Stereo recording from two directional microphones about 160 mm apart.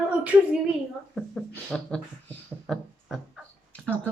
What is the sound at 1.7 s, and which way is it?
Speech, 5° left (ahead or behind).